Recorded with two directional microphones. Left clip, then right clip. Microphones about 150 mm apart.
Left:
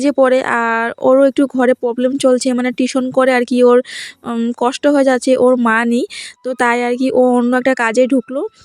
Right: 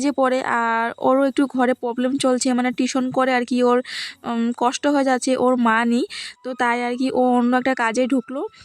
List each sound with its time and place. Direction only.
0.0 s speech: 25° left (ahead or behind)
4.3 s speech: 15° left (ahead or behind)
4.6 s speech: 25° left (ahead or behind)